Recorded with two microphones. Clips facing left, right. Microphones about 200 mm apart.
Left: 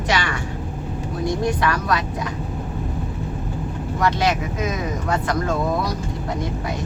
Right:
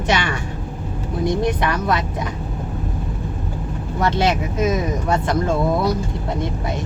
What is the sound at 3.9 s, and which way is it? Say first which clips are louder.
Vehicle: right 2 dB; 30° right (ahead or behind).